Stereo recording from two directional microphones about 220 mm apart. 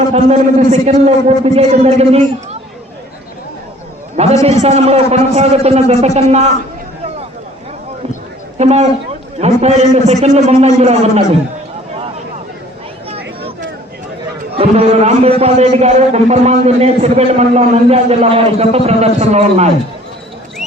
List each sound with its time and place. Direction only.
0.1 s a man's voice: 30° right (ahead or behind)
4.4 s a man's voice: 30° right (ahead or behind)
8.5 s a man's voice: 30° right (ahead or behind)
14.5 s a man's voice: 25° right (ahead or behind)